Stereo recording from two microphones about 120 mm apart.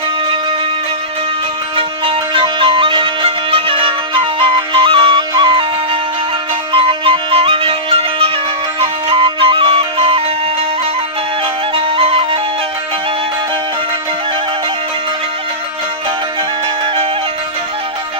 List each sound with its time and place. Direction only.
1.7 s music: 45° right (ahead or behind)
11.7 s music: 50° right (ahead or behind)